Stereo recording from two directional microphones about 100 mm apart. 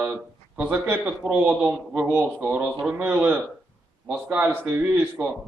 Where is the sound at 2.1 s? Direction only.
20° right (ahead or behind).